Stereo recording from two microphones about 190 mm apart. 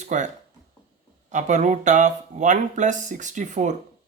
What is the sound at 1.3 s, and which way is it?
Speech, 40° right (ahead or behind).